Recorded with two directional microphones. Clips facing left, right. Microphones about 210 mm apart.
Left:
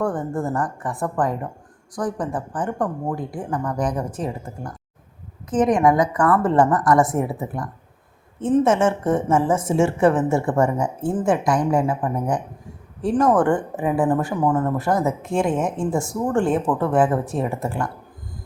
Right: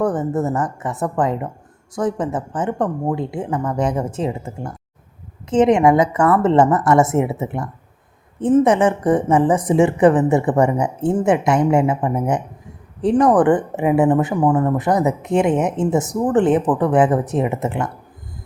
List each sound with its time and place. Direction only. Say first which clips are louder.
0.0 s a woman's voice: right 4 dB; 20° right (ahead or behind)